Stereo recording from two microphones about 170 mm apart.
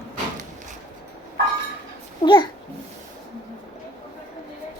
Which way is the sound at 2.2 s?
25° left (ahead or behind).